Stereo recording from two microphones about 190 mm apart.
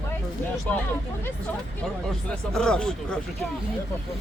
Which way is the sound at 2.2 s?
5° left (ahead or behind).